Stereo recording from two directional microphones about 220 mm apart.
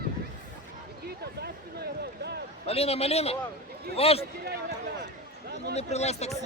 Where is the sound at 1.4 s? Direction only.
45° right (ahead or behind).